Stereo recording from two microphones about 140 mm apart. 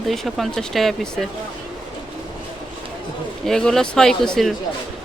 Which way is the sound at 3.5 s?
5° left (ahead or behind).